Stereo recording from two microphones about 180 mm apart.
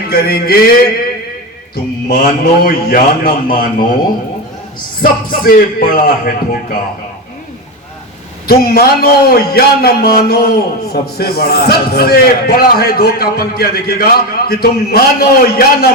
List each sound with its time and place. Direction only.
0.1 s a man's voice: 60° left (ahead or behind)
1.7 s a man's voice: 55° left (ahead or behind)
5.3 s a man's voice: 50° left (ahead or behind)
8.4 s a man's voice: 60° left (ahead or behind)